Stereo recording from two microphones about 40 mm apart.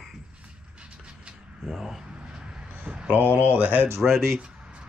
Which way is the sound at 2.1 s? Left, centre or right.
Centre.